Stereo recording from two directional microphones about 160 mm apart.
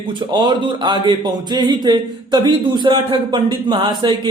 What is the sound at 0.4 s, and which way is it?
Speech, 30° right (ahead or behind).